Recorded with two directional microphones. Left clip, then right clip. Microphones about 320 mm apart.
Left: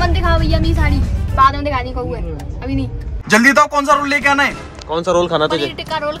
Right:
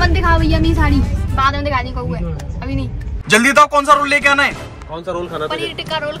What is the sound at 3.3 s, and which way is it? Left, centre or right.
Speech, centre.